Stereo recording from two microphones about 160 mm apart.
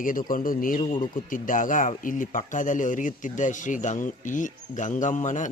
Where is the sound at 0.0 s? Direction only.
60° left (ahead or behind).